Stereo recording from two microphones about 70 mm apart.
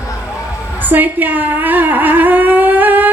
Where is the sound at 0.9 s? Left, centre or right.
Right.